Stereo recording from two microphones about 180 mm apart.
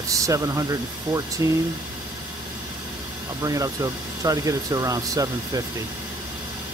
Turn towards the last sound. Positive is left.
turn(degrees=-20)  # may be behind; listen again after turning